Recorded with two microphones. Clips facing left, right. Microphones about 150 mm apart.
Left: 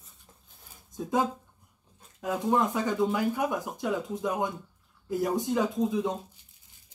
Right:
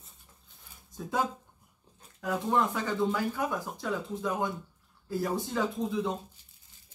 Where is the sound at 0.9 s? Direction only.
20° left (ahead or behind).